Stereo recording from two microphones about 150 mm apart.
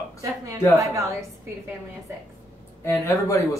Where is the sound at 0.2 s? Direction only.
20° right (ahead or behind).